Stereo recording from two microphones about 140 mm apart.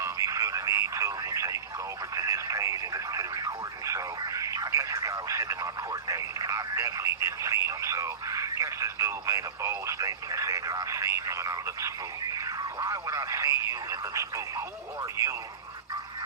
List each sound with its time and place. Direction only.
0.0 s radio: 20° right (ahead or behind)
2.1 s speech: 25° right (ahead or behind)